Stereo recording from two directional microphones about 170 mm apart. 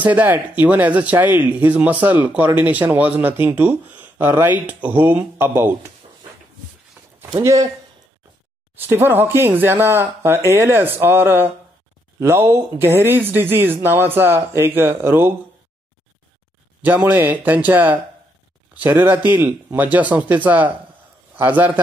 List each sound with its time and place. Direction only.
0.0 s speech: 10° right (ahead or behind)
7.2 s speech: 15° right (ahead or behind)
8.7 s speech: 15° right (ahead or behind)
16.8 s speech: 10° right (ahead or behind)